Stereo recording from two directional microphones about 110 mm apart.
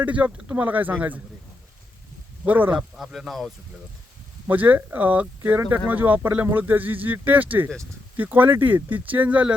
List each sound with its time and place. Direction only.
0.0 s speech: 10° right (ahead or behind)
2.4 s speech: 15° right (ahead or behind)
2.9 s speech: 5° right (ahead or behind)
4.4 s speech: 15° right (ahead or behind)